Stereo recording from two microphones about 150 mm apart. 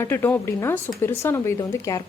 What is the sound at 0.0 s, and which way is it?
Speech, 15° left (ahead or behind).